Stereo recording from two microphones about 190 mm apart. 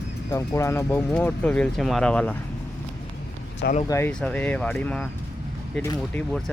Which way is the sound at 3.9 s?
15° left (ahead or behind).